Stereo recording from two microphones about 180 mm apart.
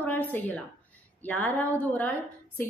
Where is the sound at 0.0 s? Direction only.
10° left (ahead or behind).